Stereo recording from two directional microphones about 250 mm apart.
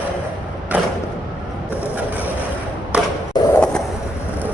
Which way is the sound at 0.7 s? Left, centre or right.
Centre.